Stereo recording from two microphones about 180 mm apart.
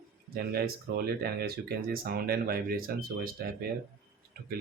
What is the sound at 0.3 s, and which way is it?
Speech, 55° right (ahead or behind).